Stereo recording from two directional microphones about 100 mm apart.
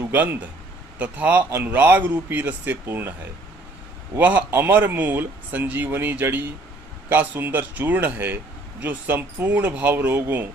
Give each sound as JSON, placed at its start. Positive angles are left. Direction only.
{"t": 0.0, "sound": "a man's voice", "side_deg": -20}
{"t": 4.2, "sound": "speech", "side_deg": -15}